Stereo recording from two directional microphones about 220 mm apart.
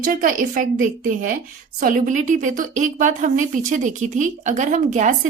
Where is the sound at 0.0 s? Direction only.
40° right (ahead or behind).